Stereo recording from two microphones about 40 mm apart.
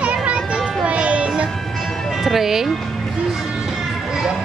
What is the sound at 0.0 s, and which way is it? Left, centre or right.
Children playing, right.